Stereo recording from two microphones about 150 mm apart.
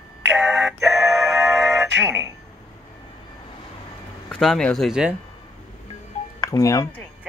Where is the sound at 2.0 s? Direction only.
15° right (ahead or behind).